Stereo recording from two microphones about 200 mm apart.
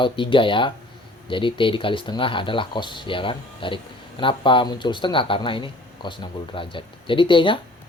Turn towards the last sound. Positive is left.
turn(degrees=25)  # may be behind; listen again after turning